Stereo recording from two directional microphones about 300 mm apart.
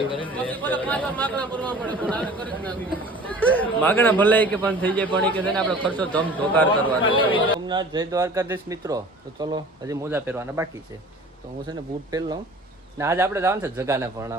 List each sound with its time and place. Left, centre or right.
0.3 s a man's voice: centre
7.0 s a man's voice: centre
7.7 s a man's voice: centre
13.0 s a man's voice: centre